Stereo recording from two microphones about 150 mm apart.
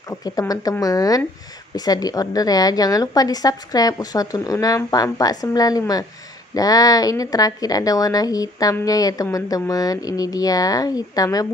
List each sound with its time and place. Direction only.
0.1 s a woman's voice: 25° left (ahead or behind)